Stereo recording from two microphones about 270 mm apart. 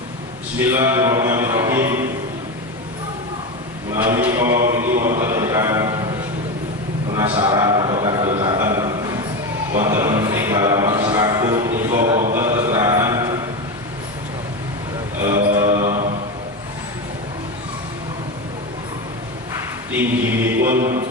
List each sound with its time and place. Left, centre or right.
0.7 s speech: centre
3.9 s a man's voice: centre
5.2 s mantra: centre
7.2 s a man's voice: centre
8.6 s a sound: centre
9.7 s music: centre
12.3 s mantra: centre
15.6 s mantra: right
19.9 s a capella: centre